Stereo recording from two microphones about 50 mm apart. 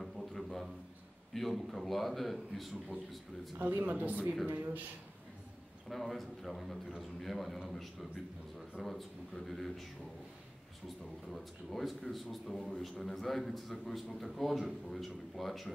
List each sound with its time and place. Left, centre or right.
0.0 s a sound: centre
1.3 s a man's voice: centre
3.5 s speech: right
4.5 s speech: right
5.9 s a man's voice: centre
11.3 s a man's voice: centre